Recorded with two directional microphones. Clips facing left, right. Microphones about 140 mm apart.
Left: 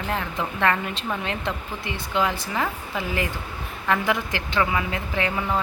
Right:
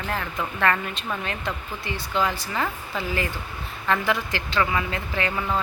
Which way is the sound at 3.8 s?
15° left (ahead or behind).